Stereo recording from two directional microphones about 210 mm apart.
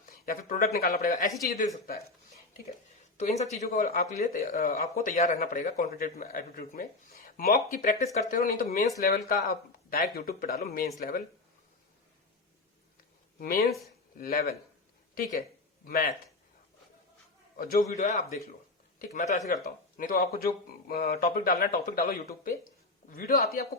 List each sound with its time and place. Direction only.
0.0 s speech: 40° left (ahead or behind)
3.2 s speech: 30° left (ahead or behind)
9.9 s speech: 45° left (ahead or behind)
13.4 s speech: 45° left (ahead or behind)
17.6 s speech: 45° left (ahead or behind)